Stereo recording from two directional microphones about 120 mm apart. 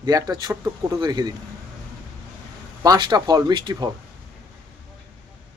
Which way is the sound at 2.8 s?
35° right (ahead or behind).